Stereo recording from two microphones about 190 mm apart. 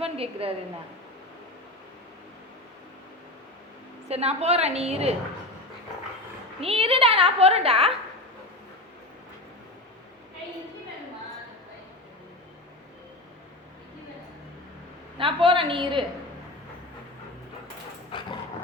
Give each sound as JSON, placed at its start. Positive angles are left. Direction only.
{"t": 0.0, "sound": "a woman's voice", "side_deg": -30}
{"t": 4.1, "sound": "a woman's voice", "side_deg": -35}
{"t": 6.6, "sound": "a woman's voice", "side_deg": -30}
{"t": 15.2, "sound": "a woman's voice", "side_deg": -30}
{"t": 18.1, "sound": "dog", "side_deg": 25}